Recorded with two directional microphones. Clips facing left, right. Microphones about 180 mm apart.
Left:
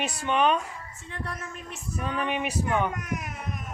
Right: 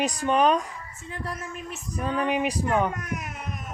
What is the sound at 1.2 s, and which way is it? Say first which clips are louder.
Female singing: right 3 dB; 5° right (ahead or behind).